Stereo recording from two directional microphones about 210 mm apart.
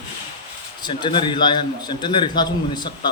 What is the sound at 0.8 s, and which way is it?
A man's voice, 25° left (ahead or behind).